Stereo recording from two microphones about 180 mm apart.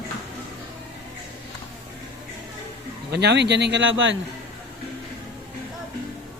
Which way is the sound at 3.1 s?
70° right (ahead or behind).